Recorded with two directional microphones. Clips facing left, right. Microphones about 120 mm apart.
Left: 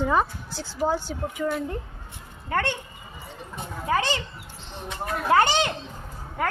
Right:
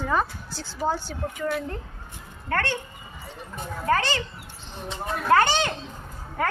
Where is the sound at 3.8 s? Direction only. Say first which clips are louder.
Right 1 dB; 15° left (ahead or behind).